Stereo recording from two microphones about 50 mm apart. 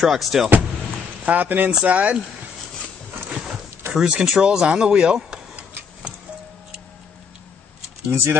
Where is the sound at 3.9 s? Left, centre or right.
Centre.